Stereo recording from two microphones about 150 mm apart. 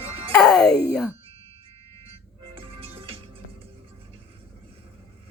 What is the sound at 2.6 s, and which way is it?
Music, 40° right (ahead or behind).